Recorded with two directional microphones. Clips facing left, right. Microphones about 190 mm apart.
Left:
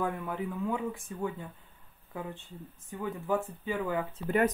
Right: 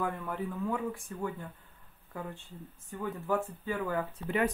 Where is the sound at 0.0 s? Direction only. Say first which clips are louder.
Left 1 dB; 15° left (ahead or behind).